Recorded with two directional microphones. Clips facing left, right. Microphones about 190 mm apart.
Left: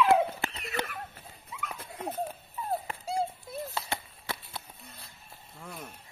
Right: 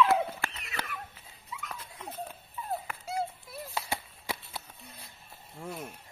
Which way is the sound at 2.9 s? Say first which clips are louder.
Left 3 dB; 30° left (ahead or behind).